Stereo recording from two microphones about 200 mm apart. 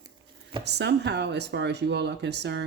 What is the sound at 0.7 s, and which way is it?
Speech, 60° right (ahead or behind).